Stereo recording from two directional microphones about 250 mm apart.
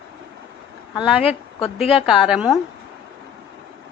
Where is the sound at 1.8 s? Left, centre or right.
Centre.